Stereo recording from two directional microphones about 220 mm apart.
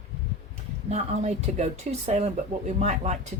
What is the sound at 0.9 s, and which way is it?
Speech, 30° right (ahead or behind).